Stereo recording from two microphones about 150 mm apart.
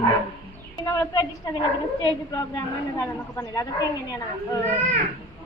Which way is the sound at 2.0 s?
20° left (ahead or behind).